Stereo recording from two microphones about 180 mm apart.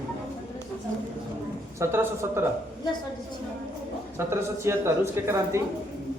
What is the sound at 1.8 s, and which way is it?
Speech, 15° right (ahead or behind).